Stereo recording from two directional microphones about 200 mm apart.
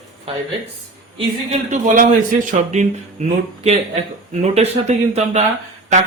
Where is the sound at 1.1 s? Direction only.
35° right (ahead or behind).